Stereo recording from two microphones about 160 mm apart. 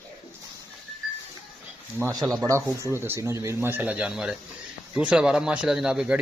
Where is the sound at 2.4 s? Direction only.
20° right (ahead or behind).